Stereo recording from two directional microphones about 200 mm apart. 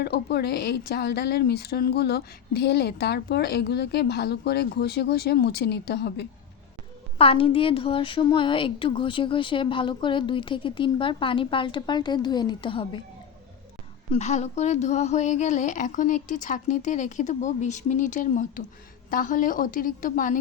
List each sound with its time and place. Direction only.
0.0 s speech: 55° left (ahead or behind)
7.2 s a woman's voice: 25° left (ahead or behind)
14.1 s a woman's voice: 35° left (ahead or behind)